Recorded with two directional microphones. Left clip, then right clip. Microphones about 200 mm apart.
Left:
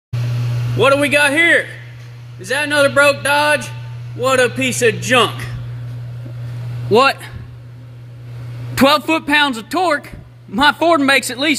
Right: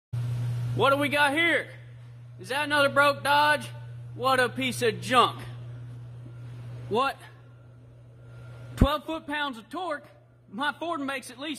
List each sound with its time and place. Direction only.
0.7 s speech: centre (ahead or behind)
6.9 s speech: 10° left (ahead or behind)
8.8 s a man's voice: 15° left (ahead or behind)